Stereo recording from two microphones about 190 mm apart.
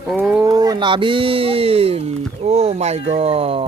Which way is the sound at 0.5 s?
20° right (ahead or behind).